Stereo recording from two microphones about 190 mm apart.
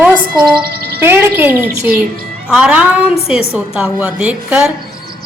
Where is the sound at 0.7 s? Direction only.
55° right (ahead or behind).